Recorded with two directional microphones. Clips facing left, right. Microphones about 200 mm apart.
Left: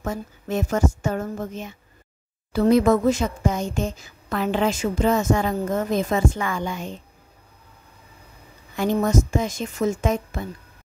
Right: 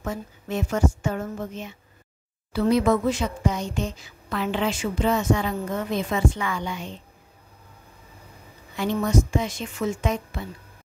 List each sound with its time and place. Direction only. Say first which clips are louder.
0.0 s speech: left 2 dB; 45° left (ahead or behind)
8.7 s speech: left 2 dB; 45° left (ahead or behind)